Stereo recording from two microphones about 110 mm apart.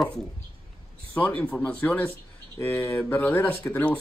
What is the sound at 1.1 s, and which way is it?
Speech, 15° left (ahead or behind).